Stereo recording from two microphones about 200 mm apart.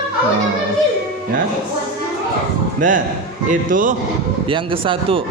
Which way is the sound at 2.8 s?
40° right (ahead or behind).